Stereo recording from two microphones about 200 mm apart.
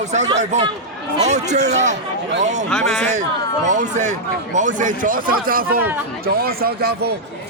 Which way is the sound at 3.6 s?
35° right (ahead or behind).